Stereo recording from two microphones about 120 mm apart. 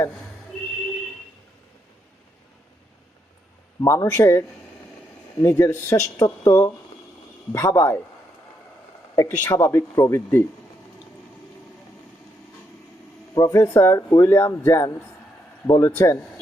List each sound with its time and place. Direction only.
3.8 s speech: 25° left (ahead or behind)
9.1 s speech: 25° left (ahead or behind)
13.3 s speech: 25° left (ahead or behind)